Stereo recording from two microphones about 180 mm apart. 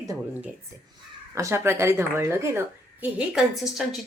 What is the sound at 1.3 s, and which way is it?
A woman's voice, 15° right (ahead or behind).